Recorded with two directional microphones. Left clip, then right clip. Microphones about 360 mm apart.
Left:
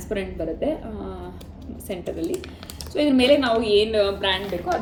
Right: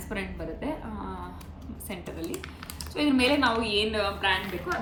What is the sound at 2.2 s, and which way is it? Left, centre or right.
Speech, left.